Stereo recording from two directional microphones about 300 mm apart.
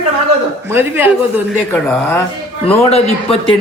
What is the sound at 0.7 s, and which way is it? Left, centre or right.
Speech, centre.